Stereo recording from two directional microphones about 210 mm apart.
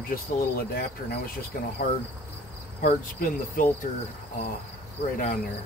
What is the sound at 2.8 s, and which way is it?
Cricket, 40° left (ahead or behind).